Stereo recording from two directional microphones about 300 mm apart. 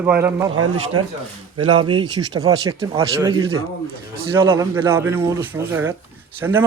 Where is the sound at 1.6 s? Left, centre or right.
Centre.